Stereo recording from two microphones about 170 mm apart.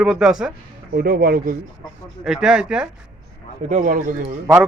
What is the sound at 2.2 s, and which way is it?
Speech, 5° right (ahead or behind).